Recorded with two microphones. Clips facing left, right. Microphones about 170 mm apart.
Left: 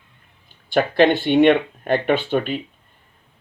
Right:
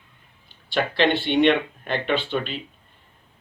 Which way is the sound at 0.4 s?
45° left (ahead or behind).